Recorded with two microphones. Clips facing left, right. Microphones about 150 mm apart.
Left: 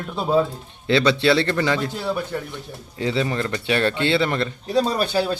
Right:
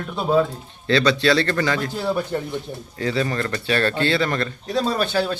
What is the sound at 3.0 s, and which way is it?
A man's voice, 20° left (ahead or behind).